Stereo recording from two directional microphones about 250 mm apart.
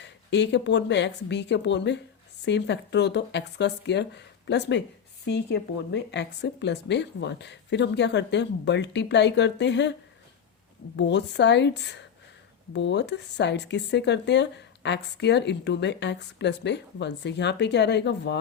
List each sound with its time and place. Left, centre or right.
0.0 s speech: left
10.9 s speech: left